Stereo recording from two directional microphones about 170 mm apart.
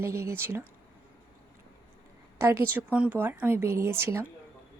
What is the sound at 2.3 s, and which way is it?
Speech, 15° right (ahead or behind).